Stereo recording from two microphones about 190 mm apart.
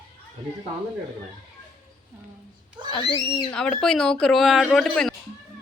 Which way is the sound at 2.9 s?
25° left (ahead or behind).